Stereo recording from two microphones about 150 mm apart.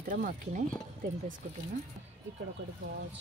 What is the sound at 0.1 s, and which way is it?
Speech, 60° right (ahead or behind).